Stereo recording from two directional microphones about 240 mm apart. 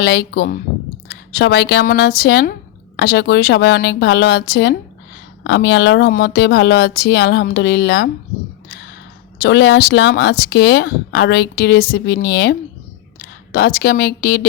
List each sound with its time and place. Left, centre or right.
0.0 s a woman's voice: left
9.4 s a woman's voice: left